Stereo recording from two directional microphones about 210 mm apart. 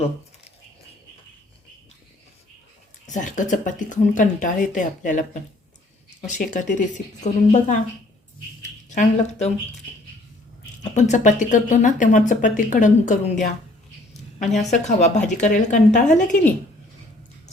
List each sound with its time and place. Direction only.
3.1 s speech: 35° left (ahead or behind)
6.5 s speech: 35° left (ahead or behind)
10.9 s speech: 35° left (ahead or behind)
14.5 s speech: 30° left (ahead or behind)